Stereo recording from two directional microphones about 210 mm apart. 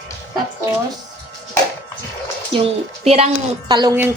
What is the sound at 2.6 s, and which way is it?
Speech, 30° right (ahead or behind).